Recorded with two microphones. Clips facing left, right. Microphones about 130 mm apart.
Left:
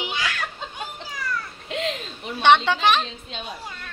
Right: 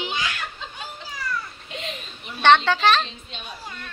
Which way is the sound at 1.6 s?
90° left.